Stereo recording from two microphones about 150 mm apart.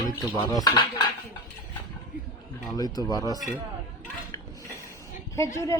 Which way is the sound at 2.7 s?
25° left (ahead or behind).